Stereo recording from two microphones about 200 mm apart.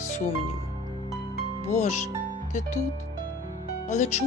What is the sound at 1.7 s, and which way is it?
Speech, 35° left (ahead or behind).